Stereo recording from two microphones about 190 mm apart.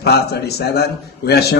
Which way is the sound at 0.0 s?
55° left (ahead or behind).